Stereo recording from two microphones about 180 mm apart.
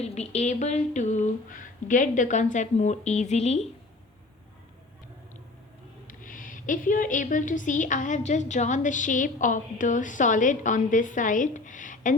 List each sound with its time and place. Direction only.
0.0 s speech: 40° left (ahead or behind)
6.1 s a woman's voice: 50° left (ahead or behind)